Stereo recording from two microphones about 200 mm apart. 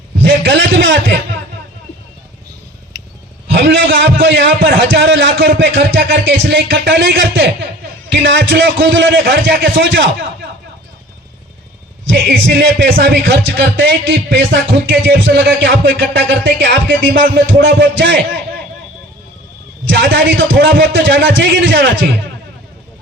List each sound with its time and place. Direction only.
0.2 s a sound: 65° right (ahead or behind)
3.5 s a man's voice: 70° right (ahead or behind)
12.0 s a man's voice: 50° right (ahead or behind)
17.2 s speech: 45° right (ahead or behind)
17.6 s a man's voice: 65° right (ahead or behind)
19.9 s a man's voice: 60° right (ahead or behind)